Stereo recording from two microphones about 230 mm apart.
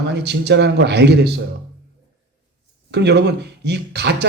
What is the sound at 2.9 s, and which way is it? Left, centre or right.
Speech, right.